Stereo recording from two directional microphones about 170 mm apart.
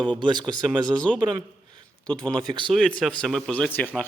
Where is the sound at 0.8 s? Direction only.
5° left (ahead or behind).